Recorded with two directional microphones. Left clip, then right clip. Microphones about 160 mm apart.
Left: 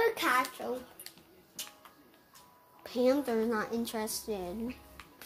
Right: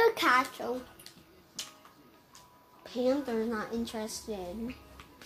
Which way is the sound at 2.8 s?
55° left (ahead or behind).